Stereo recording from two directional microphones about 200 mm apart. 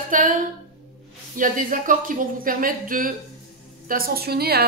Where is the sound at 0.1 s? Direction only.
45° right (ahead or behind).